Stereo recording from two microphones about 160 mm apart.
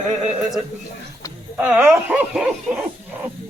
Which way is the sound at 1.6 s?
10° right (ahead or behind).